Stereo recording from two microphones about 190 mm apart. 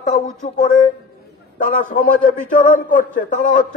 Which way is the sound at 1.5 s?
45° left (ahead or behind).